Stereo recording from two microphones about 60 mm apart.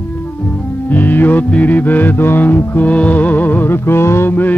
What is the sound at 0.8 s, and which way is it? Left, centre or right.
Music, left.